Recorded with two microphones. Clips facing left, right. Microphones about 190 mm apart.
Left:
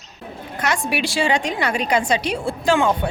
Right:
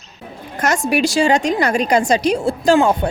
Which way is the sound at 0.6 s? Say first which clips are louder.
Right 6 dB; 45° right (ahead or behind).